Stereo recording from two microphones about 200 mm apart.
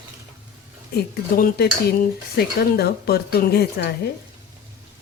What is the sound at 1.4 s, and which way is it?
Speech, 45° left (ahead or behind).